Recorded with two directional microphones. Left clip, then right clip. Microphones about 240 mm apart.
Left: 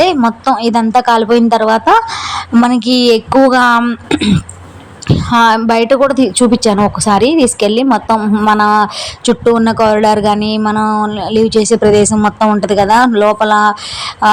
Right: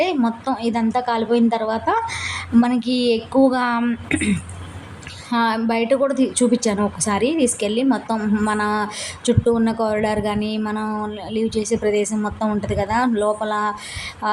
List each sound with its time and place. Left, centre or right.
0.0 s a woman's voice: left